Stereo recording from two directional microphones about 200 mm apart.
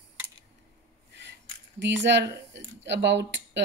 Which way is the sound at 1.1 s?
60° right (ahead or behind).